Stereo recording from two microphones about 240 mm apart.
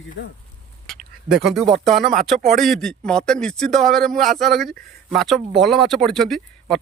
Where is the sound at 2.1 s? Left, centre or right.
Right.